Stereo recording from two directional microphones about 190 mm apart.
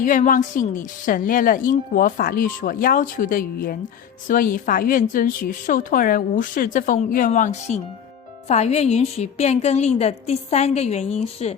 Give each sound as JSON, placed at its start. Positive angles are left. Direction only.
{"t": 0.0, "sound": "a woman's voice", "side_deg": 45}